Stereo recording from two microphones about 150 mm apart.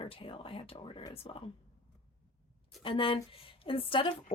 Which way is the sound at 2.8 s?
35° left (ahead or behind).